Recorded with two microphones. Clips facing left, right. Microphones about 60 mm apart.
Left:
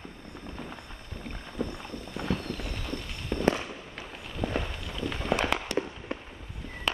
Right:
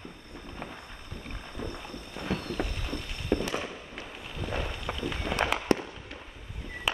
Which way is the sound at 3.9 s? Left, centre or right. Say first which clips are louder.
Even; centre.